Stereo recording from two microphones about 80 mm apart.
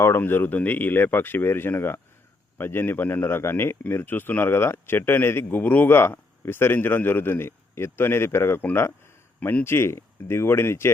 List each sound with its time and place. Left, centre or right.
0.2 s speech: left